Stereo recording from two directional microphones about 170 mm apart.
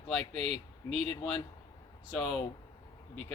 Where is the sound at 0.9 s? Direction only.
Centre (ahead or behind).